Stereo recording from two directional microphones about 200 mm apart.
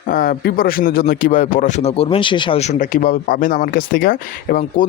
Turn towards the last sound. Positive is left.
turn(degrees=45)  # may be behind; listen again after turning